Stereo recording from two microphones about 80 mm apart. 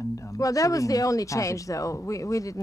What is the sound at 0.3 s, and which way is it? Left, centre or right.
Speech, left.